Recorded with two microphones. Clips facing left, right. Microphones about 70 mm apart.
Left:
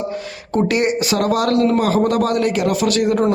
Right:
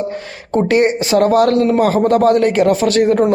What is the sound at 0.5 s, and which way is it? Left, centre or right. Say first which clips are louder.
A man's voice: right 4 dB; right.